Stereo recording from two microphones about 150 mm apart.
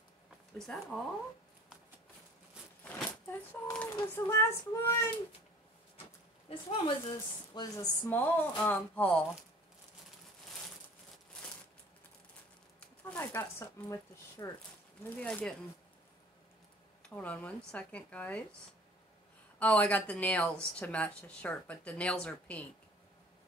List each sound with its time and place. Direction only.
0.6 s speech: centre (ahead or behind)
2.8 s speech: 10° left (ahead or behind)
7.1 s speech: 25° left (ahead or behind)
8.3 s speech: 10° left (ahead or behind)
12.8 s speech: 10° left (ahead or behind)
17.1 s speech: 10° left (ahead or behind)
19.6 s speech: 10° left (ahead or behind)